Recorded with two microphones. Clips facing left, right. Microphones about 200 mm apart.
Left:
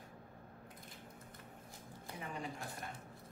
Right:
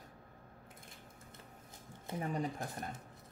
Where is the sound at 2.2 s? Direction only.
40° right (ahead or behind).